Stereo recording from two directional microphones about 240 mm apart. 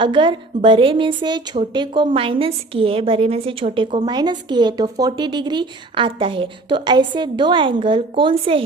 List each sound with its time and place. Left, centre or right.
0.0 s a woman's voice: right